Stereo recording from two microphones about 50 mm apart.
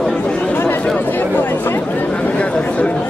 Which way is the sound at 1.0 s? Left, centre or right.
Left.